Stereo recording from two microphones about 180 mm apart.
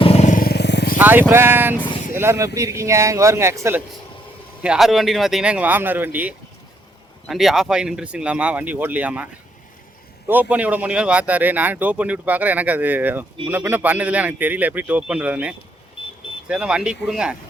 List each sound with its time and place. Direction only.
0.0 s vehicle: 35° left (ahead or behind); by 0.9 s 70° left (ahead or behind)
0.9 s speech: 10° right (ahead or behind)
4.6 s speech: 5° right (ahead or behind)